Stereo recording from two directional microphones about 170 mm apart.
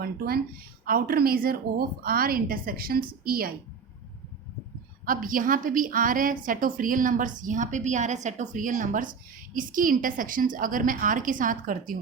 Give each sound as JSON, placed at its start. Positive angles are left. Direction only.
{"t": 0.9, "sound": "a woman's voice", "side_deg": -60}
{"t": 5.0, "sound": "a woman's voice", "side_deg": -55}